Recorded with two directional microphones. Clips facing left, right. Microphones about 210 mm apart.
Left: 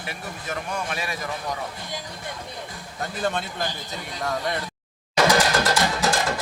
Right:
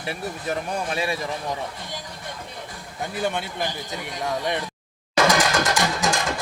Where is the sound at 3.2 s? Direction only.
15° right (ahead or behind).